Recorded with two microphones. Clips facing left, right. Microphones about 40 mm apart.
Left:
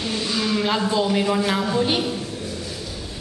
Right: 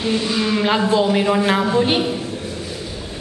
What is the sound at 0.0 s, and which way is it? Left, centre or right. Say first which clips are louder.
A woman's voice: right 5 dB; centre.